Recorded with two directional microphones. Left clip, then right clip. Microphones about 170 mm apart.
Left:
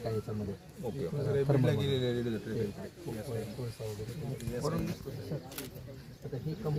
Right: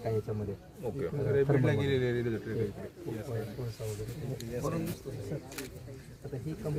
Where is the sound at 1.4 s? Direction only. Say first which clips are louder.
Right 2 dB; 5° right (ahead or behind).